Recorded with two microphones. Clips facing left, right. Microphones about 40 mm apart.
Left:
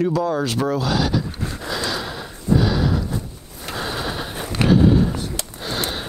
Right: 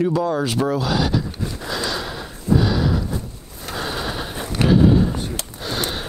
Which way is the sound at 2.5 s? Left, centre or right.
Centre.